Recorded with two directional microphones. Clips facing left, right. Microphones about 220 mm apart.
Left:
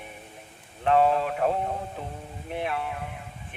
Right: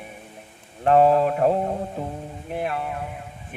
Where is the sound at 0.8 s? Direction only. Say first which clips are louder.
Right 5 dB; 40° right (ahead or behind).